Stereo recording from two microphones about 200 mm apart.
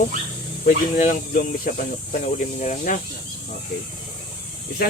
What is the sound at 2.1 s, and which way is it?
Speech, 40° left (ahead or behind).